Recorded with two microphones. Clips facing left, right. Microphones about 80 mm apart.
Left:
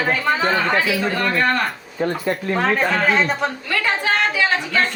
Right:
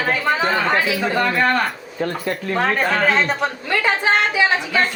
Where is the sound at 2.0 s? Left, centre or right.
Centre.